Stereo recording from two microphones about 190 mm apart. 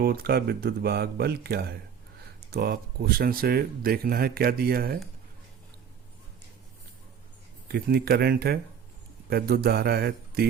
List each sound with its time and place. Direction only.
0.0 s speech: 55° right (ahead or behind)
7.7 s speech: 55° right (ahead or behind)